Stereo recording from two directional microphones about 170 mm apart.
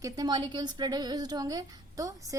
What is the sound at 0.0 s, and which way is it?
A woman's voice, 25° right (ahead or behind).